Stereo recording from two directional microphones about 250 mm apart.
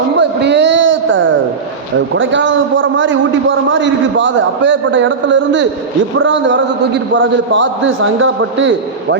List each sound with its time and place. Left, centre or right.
0.2 s a man's voice: right